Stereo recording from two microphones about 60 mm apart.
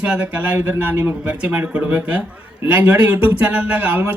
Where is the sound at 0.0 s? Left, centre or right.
Right.